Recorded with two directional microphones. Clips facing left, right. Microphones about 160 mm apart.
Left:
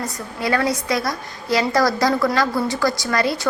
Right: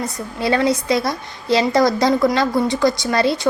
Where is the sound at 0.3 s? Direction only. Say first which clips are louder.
Right 3 dB; 25° right (ahead or behind).